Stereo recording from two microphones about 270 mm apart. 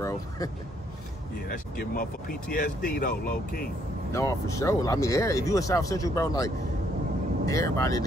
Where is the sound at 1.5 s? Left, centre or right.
Left.